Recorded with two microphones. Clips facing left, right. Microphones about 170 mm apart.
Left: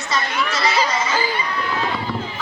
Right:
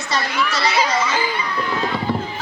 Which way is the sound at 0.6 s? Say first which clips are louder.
Even; 10° right (ahead or behind).